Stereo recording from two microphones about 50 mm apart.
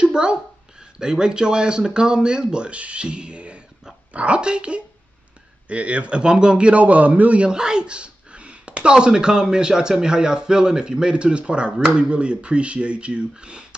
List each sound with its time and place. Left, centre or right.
0.0 s speech: centre
6.7 s a man's voice: right
7.4 s speech: centre